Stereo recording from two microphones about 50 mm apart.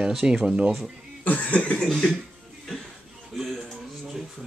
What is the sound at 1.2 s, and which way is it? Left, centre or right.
Cough, left.